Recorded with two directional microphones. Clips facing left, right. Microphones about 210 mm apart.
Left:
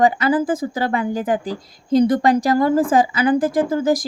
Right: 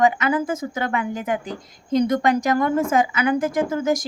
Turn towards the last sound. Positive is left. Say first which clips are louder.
# left 3 dB
turn(degrees=35)  # may be behind; listen again after turning